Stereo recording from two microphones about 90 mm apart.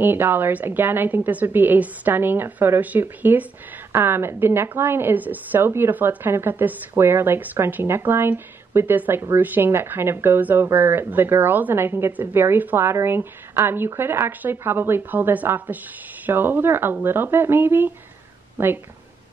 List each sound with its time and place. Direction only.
0.0 s a woman's voice: 25° right (ahead or behind)